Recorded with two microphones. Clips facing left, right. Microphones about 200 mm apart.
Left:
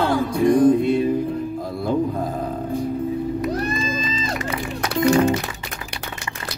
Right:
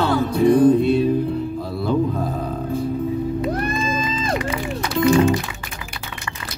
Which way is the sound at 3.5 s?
55° right (ahead or behind).